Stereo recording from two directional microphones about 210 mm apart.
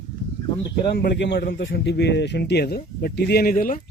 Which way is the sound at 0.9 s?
55° left (ahead or behind).